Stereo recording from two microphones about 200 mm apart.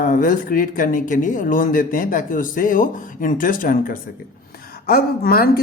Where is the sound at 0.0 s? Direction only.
40° left (ahead or behind).